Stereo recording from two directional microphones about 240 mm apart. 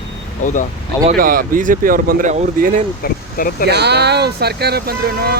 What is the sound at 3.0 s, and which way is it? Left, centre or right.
Speech, left.